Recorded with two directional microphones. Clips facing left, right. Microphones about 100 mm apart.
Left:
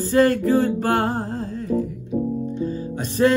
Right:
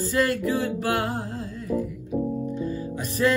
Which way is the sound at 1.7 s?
10° right (ahead or behind).